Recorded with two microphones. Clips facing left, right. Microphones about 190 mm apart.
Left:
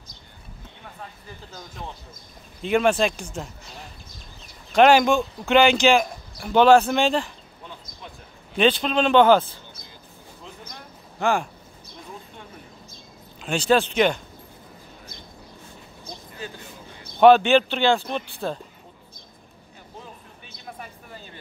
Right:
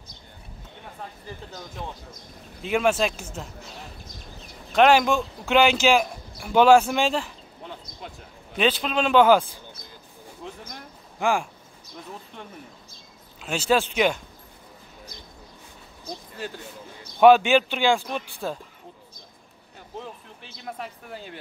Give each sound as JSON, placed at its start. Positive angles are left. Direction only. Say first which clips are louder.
{"t": 2.6, "sound": "speech", "louder": "left 2 dB", "side_deg": -5}
{"t": 4.7, "sound": "speech", "louder": "left 2 dB", "side_deg": 0}
{"t": 8.5, "sound": "speech", "louder": "left 3 dB", "side_deg": -5}
{"t": 11.1, "sound": "speech", "louder": "left 1 dB", "side_deg": -10}
{"t": 13.4, "sound": "speech", "louder": "left 2 dB", "side_deg": -5}
{"t": 17.2, "sound": "speech", "louder": "left 1 dB", "side_deg": -10}
{"t": 20.5, "sound": "a sound", "louder": "right 4 dB", "side_deg": -70}